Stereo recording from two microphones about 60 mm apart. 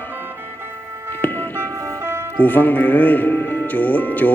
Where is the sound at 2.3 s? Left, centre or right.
Left.